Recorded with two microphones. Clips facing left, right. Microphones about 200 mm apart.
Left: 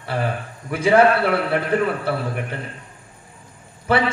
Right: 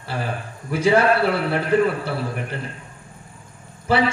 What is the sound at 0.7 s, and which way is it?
Speech, 55° left (ahead or behind).